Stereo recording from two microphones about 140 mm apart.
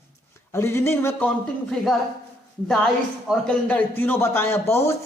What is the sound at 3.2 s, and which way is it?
Speech, 10° left (ahead or behind).